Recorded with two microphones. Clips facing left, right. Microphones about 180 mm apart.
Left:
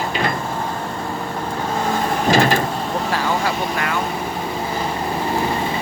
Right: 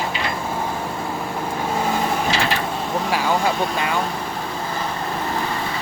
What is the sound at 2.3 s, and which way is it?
Vehicle, 45° left (ahead or behind).